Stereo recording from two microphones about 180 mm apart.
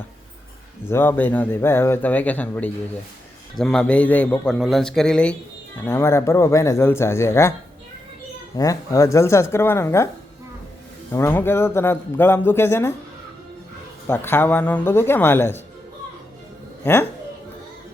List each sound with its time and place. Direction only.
0.9 s a man's voice: 10° left (ahead or behind)
8.5 s speech: 20° left (ahead or behind)
11.1 s speech: 15° left (ahead or behind)
14.1 s speech: 10° left (ahead or behind)
16.8 s speech: 10° left (ahead or behind)